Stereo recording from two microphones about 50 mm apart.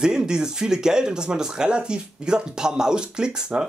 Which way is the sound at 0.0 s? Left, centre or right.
Centre.